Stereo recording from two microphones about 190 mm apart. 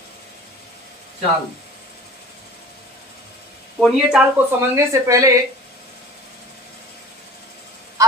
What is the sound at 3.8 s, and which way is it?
Speech, 5° right (ahead or behind).